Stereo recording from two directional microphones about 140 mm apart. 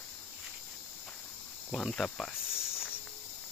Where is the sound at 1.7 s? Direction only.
Centre (ahead or behind).